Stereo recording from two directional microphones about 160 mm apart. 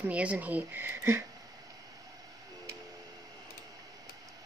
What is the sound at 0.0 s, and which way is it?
Speech, 10° right (ahead or behind).